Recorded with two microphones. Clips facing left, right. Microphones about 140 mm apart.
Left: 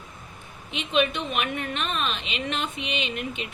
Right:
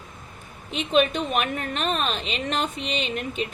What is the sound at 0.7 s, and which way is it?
A woman's voice, 40° right (ahead or behind).